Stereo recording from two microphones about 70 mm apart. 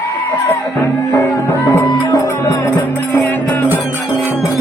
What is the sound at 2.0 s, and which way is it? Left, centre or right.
Speech, left.